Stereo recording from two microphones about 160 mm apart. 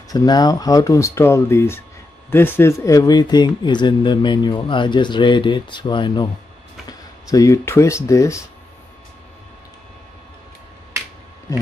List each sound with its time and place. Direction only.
0.1 s speech: 25° left (ahead or behind)